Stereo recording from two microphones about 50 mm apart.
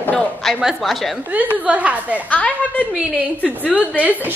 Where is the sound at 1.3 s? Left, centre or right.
Right.